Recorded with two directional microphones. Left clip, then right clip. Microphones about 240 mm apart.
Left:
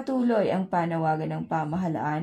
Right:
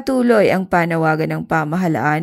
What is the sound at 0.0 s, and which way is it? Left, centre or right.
Speech, right.